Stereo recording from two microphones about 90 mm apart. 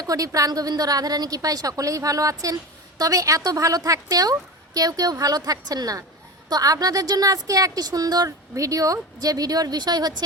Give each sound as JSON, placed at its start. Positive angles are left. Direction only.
{"t": 0.0, "sound": "a woman's voice", "side_deg": -40}